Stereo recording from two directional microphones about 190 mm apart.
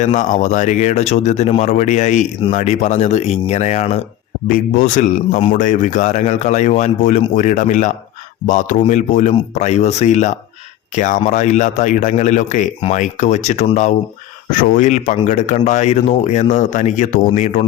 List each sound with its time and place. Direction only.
0.0 s speech: 40° left (ahead or behind)
4.4 s speech: 45° left (ahead or behind)